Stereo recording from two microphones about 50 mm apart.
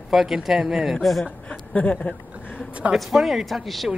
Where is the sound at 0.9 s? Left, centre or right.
Centre.